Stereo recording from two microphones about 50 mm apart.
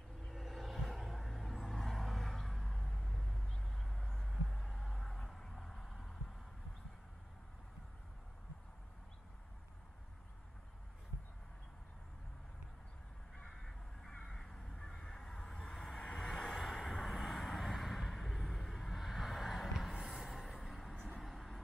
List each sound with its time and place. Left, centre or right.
0.3 s a sound: centre
13.5 s crow: centre
16.0 s vehicle: centre
16.3 s vehicle: centre
19.9 s a sound: centre
20.9 s vehicle: left
21.2 s vehicle: centre